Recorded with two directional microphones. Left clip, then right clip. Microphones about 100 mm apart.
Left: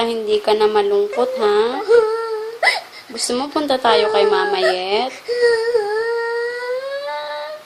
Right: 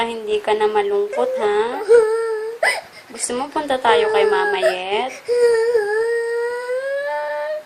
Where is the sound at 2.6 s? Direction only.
Centre (ahead or behind).